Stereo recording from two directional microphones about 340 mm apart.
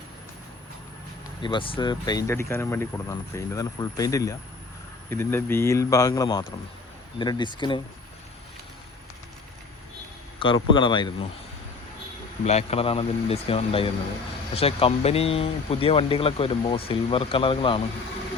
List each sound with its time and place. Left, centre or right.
1.4 s speech: centre
10.4 s speech: centre
12.5 s speech: centre